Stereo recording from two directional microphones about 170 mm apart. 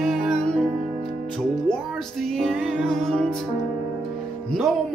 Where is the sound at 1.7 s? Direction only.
Centre (ahead or behind).